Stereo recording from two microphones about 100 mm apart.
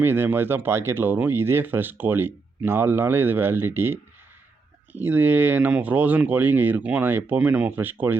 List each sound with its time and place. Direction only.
0.0 s speech: 20° right (ahead or behind)